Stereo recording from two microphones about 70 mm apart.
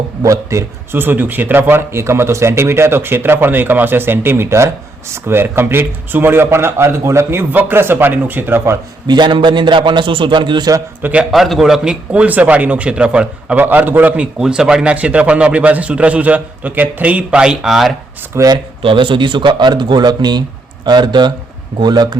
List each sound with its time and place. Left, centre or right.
0.2 s a man's voice: right
0.9 s speech: right
9.0 s speech: right
11.0 s speech: centre
11.3 s a man's voice: centre
12.1 s speech: right
13.6 s speech: right
14.3 s a man's voice: centre
18.3 s speech: right
19.4 s speech: right